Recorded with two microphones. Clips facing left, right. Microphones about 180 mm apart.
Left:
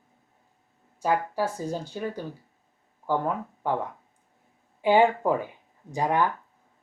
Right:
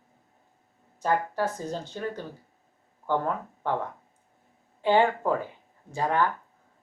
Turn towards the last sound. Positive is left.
turn(degrees=15)  # may be behind; listen again after turning